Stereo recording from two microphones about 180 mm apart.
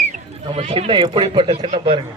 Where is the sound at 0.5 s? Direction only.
35° right (ahead or behind).